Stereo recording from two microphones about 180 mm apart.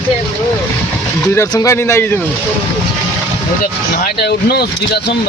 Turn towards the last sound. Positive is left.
turn(degrees=65)  # may be behind; listen again after turning